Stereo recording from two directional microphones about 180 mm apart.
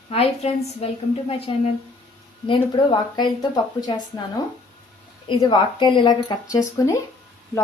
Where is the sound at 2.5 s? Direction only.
25° left (ahead or behind).